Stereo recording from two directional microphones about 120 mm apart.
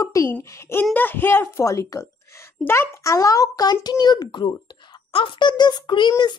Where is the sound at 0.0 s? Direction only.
25° left (ahead or behind).